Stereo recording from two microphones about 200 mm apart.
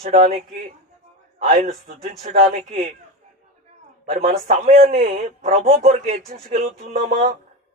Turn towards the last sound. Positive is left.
turn(degrees=-35)  # may be behind; listen again after turning